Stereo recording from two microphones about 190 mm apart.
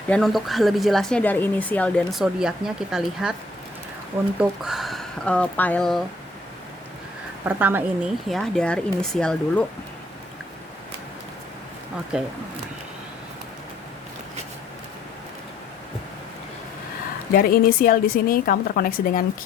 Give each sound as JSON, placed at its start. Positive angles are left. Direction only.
{"t": 0.1, "sound": "speech", "side_deg": 0}
{"t": 4.4, "sound": "speech", "side_deg": -5}
{"t": 7.4, "sound": "speech", "side_deg": -10}
{"t": 12.1, "sound": "speech", "side_deg": -5}
{"t": 17.3, "sound": "a woman's voice", "side_deg": 50}